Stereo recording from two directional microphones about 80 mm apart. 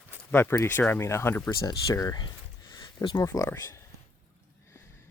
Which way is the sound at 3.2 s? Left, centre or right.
Left.